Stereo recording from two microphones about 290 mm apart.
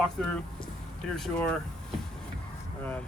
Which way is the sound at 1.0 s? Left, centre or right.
Centre.